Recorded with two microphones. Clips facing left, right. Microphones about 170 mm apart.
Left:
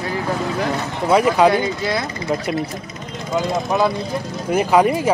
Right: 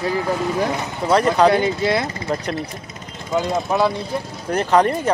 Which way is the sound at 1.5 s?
25° right (ahead or behind).